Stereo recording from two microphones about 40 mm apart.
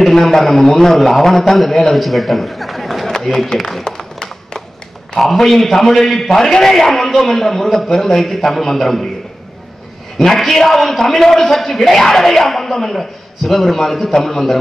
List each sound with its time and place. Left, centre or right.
0.0 s a man's voice: centre
3.1 s run: centre
3.5 s a man's voice: centre
3.8 s tap: centre
5.2 s a man's voice: centre
10.1 s a man's voice: centre